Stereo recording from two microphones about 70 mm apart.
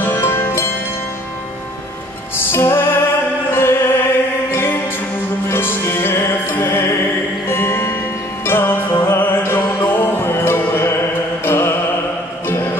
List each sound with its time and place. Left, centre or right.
0.0 s music: left
2.3 s music: left